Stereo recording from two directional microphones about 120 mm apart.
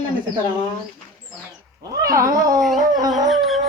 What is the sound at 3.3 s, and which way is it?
Music, centre (ahead or behind).